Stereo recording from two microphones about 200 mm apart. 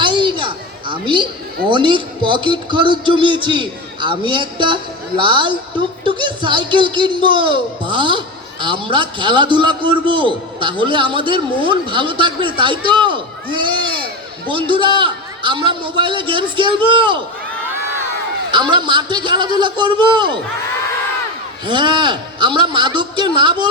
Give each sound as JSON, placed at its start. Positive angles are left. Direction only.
{"t": 0.0, "sound": "a sound", "side_deg": -25}
{"t": 1.7, "sound": "a man's voice", "side_deg": -25}
{"t": 18.5, "sound": "a man's voice", "side_deg": -25}
{"t": 21.7, "sound": "a man's voice", "side_deg": -25}